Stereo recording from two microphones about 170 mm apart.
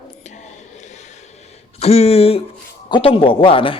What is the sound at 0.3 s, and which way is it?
Music, 45° left (ahead or behind).